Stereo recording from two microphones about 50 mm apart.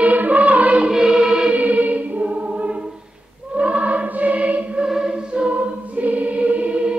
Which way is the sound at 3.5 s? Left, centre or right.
Right.